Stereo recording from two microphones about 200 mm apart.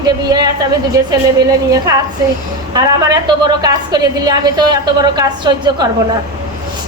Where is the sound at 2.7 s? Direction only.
20° right (ahead or behind).